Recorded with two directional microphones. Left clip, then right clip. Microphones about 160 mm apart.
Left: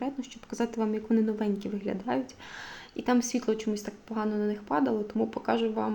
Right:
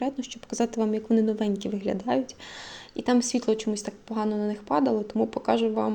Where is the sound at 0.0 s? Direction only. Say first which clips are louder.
Right 5 dB; 20° right (ahead or behind).